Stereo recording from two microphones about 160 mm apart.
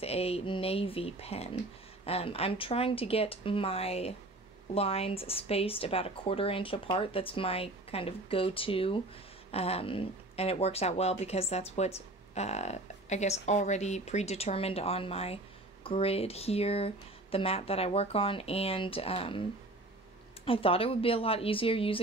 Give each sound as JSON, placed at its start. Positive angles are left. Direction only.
{"t": 0.0, "sound": "speech", "side_deg": 40}
{"t": 20.4, "sound": "speech", "side_deg": 35}